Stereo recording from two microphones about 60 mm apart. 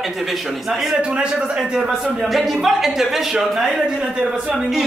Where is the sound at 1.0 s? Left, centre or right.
Centre.